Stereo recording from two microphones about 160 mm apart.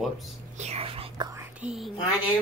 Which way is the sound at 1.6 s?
5° right (ahead or behind).